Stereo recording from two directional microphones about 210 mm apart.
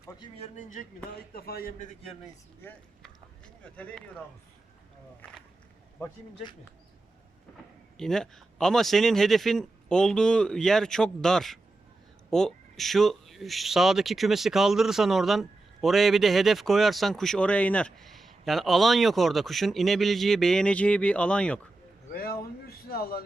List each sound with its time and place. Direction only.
0.3 s a man's voice: 35° left (ahead or behind)
3.6 s speech: 5° left (ahead or behind)
7.9 s speech: 5° left (ahead or behind)
22.1 s speech: 45° left (ahead or behind)